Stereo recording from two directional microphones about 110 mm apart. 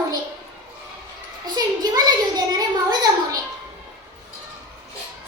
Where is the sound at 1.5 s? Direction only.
35° right (ahead or behind).